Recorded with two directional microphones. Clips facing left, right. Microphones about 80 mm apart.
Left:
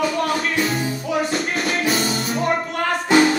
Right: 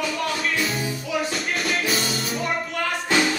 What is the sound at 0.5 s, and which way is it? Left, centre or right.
Music, left.